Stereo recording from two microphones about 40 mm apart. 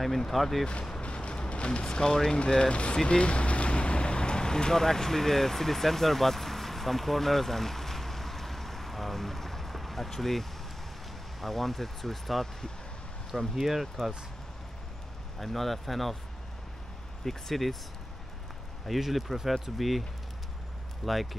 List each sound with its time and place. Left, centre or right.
0.3 s speech: centre
1.0 s vehicle: left
2.3 s speech: left
3.1 s boat: left; by 10.4 s centre
11.4 s speech: centre
15.3 s speech: centre
17.2 s speech: centre
18.9 s speech: centre